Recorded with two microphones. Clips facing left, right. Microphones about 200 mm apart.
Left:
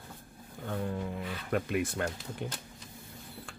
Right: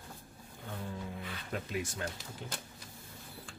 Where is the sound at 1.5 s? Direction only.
60° left (ahead or behind).